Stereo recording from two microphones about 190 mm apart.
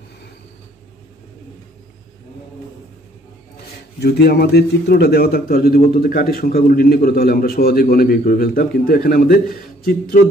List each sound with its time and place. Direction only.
4.0 s a man's voice: 55° left (ahead or behind)